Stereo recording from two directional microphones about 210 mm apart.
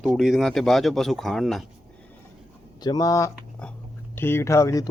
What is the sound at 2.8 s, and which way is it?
Speech, 20° left (ahead or behind).